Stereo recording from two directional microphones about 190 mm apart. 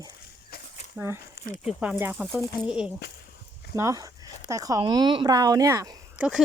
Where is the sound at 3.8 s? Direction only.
15° right (ahead or behind).